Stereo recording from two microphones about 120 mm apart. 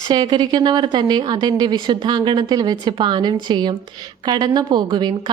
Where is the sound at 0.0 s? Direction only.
35° right (ahead or behind).